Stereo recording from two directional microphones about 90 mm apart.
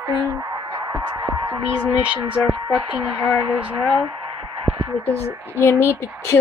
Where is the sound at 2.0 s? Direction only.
15° right (ahead or behind).